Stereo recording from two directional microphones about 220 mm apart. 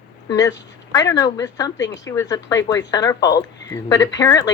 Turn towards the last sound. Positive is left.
turn(degrees=15)  # may be behind; listen again after turning